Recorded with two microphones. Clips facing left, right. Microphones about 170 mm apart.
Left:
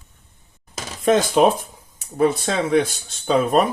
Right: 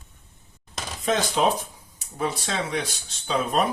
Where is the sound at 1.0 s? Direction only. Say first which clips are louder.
Left 7 dB; 55° left (ahead or behind).